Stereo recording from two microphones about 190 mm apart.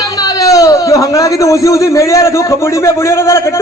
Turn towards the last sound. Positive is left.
turn(degrees=15)  # may be behind; listen again after turning